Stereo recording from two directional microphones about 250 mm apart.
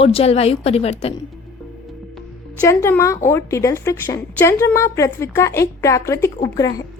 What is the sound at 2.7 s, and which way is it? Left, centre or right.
A woman's voice, centre.